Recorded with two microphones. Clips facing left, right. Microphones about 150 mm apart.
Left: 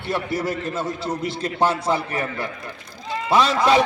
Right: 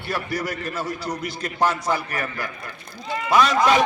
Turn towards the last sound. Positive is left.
turn(degrees=30)  # may be behind; listen again after turning